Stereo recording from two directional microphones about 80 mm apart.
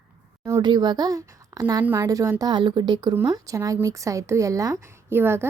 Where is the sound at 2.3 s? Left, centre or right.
Right.